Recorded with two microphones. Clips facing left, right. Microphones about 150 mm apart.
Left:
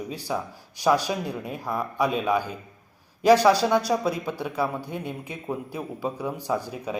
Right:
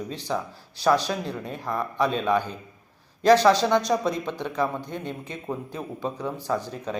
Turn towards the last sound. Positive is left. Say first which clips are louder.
# even
turn(degrees=10)  # may be behind; listen again after turning